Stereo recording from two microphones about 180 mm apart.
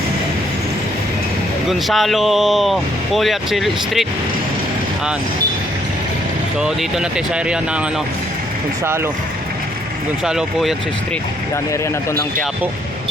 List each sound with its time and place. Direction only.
1.9 s speech: centre (ahead or behind)
6.6 s speech: 5° right (ahead or behind)
10.2 s speech: centre (ahead or behind)